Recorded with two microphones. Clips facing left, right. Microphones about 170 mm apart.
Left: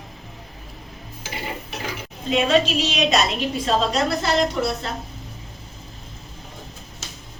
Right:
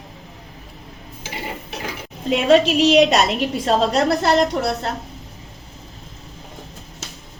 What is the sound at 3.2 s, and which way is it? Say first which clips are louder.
A woman's voice: right 3 dB; 55° right (ahead or behind).